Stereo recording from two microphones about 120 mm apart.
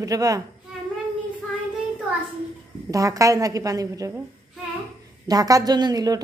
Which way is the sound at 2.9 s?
30° right (ahead or behind).